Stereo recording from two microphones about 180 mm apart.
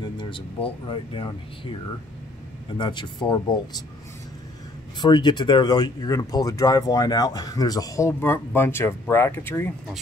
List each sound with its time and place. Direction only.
0.2 s speech: 30° left (ahead or behind)
2.8 s speech: 25° left (ahead or behind)
5.0 s speech: 25° left (ahead or behind)